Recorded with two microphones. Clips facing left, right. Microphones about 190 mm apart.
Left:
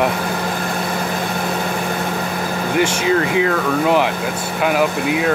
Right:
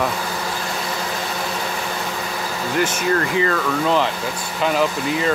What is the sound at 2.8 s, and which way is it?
Speech, 65° left (ahead or behind).